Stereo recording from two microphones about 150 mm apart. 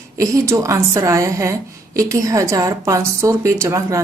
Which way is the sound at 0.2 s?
20° right (ahead or behind).